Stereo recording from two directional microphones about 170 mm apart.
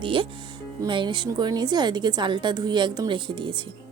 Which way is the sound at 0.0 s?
30° right (ahead or behind).